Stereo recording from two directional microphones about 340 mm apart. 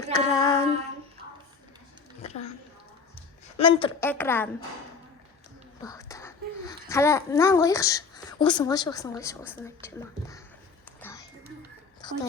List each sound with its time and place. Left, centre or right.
0.1 s female singing: centre
2.2 s a sound: centre
3.6 s a woman's voice: centre
5.8 s a woman's voice: centre
11.0 s a sound: centre
12.0 s a woman's voice: centre